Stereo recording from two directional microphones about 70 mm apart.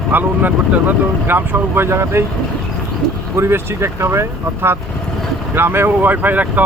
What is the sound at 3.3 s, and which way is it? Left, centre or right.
Speech, right.